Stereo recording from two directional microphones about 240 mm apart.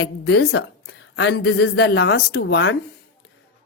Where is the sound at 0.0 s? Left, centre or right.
Left.